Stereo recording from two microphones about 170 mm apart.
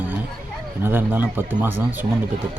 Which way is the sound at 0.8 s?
10° right (ahead or behind).